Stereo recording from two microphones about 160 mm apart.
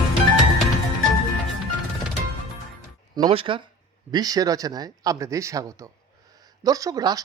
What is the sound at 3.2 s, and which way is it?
Speech, 35° right (ahead or behind).